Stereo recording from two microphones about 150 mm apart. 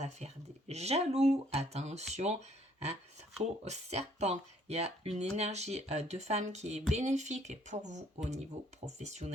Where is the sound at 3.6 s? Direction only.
45° right (ahead or behind).